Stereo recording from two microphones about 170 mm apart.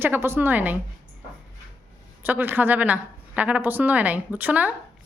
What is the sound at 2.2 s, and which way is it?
A woman's voice, 10° right (ahead or behind).